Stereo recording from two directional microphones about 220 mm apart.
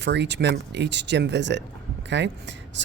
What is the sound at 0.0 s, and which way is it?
Speech, 50° right (ahead or behind).